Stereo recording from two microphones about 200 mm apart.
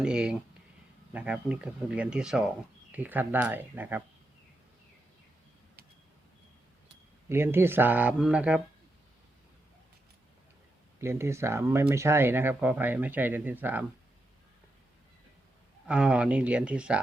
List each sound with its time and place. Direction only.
0.0 s speech: 5° right (ahead or behind)
7.3 s speech: 10° right (ahead or behind)
11.0 s speech: 15° right (ahead or behind)
15.9 s speech: 5° right (ahead or behind)